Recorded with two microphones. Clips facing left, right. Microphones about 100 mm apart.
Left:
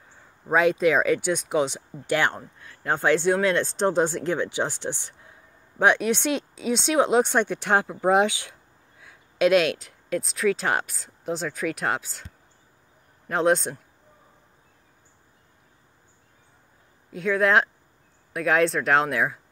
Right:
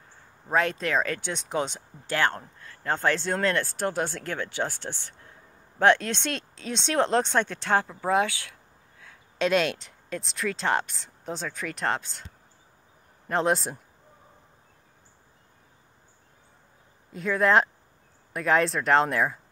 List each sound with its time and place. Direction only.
0.5 s speech: 5° left (ahead or behind)
13.3 s speech: centre (ahead or behind)
17.1 s speech: centre (ahead or behind)